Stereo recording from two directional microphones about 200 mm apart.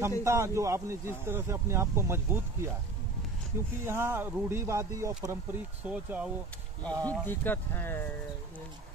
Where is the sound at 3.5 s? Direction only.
10° right (ahead or behind).